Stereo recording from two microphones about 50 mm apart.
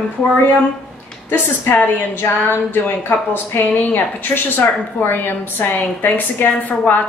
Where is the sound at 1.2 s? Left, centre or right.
Left.